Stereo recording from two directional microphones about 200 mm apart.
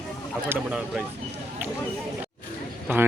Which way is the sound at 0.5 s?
5° right (ahead or behind).